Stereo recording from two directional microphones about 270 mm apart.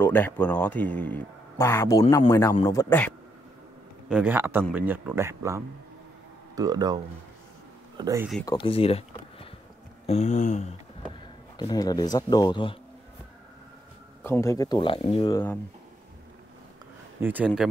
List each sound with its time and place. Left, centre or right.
0.0 s speech: centre
4.1 s speech: centre
8.0 s speech: centre
8.5 s speech: centre
10.0 s a sound: left
11.5 s speech: centre
14.2 s speech: centre
17.2 s speech: centre